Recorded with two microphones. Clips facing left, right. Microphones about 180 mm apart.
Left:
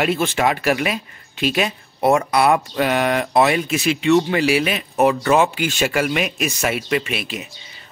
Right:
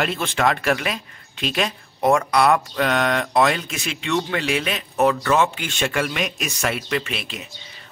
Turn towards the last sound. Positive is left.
turn(degrees=5)  # may be behind; listen again after turning